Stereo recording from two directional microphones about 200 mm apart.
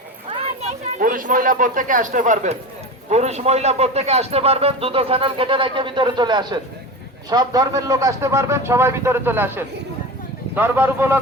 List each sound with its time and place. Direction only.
0.3 s children playing: 30° right (ahead or behind)
0.9 s speech: 45° right (ahead or behind); by 11.2 s 10° right (ahead or behind)